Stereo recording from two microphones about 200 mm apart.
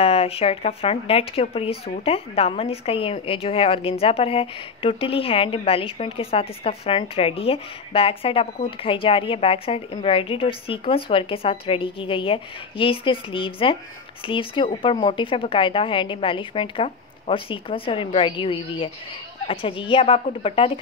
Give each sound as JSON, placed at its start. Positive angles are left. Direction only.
{"t": 0.0, "sound": "a woman's voice", "side_deg": 30}